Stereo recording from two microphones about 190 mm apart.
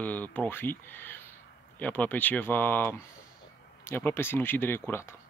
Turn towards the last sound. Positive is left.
turn(degrees=15)  # may be behind; listen again after turning